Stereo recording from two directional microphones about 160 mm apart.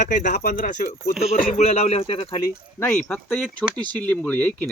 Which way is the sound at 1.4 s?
45° left (ahead or behind).